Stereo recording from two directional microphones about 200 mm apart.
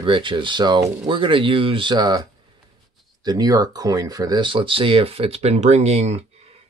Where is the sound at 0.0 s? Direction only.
25° right (ahead or behind).